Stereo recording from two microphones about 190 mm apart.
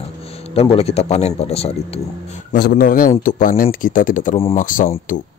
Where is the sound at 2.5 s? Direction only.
50° left (ahead or behind).